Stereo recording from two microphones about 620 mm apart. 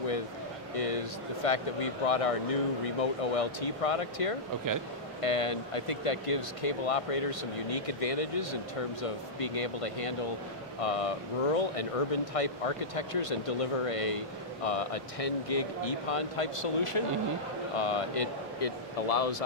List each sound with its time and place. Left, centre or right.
0.7 s speech: left